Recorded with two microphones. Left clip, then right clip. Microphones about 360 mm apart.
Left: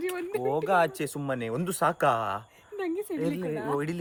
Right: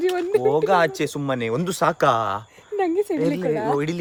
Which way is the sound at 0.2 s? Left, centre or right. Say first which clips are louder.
Right 11 dB; centre.